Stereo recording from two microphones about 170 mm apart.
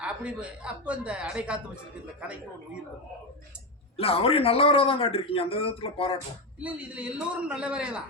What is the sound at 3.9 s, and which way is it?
A man's voice, 35° left (ahead or behind).